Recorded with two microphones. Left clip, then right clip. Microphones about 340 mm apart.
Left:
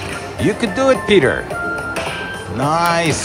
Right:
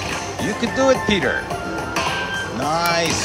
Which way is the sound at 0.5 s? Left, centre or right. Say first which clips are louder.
Left 1 dB; centre.